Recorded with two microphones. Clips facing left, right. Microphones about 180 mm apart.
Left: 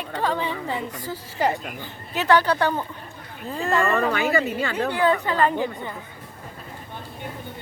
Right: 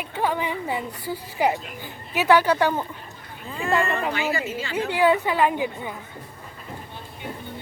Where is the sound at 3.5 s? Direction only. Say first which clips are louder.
Left 2 dB; 35° left (ahead or behind).